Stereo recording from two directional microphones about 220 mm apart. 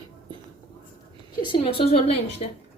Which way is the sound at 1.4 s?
20° left (ahead or behind).